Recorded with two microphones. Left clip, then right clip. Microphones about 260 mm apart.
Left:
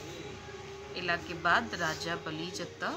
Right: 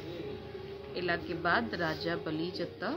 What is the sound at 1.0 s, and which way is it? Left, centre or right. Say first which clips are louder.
Speech: even; centre.